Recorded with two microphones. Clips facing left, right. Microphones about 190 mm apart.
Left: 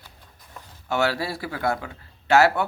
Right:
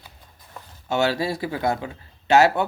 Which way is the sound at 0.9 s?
20° right (ahead or behind).